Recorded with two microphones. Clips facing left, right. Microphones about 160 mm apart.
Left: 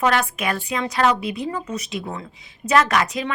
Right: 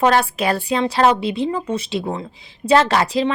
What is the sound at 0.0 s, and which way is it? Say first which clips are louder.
A woman's voice: right 4 dB; 30° right (ahead or behind).